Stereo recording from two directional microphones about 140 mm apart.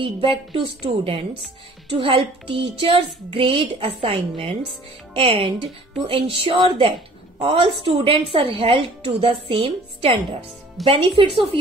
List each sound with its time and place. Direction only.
0.0 s speech: 40° right (ahead or behind)